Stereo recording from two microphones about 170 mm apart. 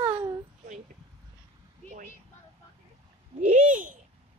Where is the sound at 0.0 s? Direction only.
20° right (ahead or behind).